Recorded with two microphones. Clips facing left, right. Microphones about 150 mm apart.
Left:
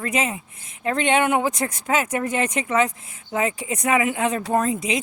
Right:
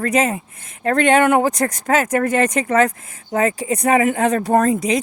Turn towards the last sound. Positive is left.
turn(degrees=-45)  # may be behind; listen again after turning